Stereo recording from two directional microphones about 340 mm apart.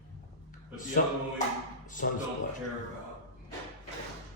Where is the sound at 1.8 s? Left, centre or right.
Left.